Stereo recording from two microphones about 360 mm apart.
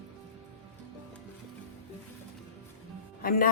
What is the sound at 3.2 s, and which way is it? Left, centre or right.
Music, left.